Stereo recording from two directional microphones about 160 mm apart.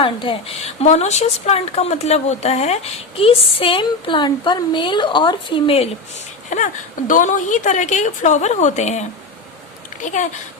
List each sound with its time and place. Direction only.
0.0 s speech: 30° left (ahead or behind)
6.5 s a woman's voice: 50° left (ahead or behind)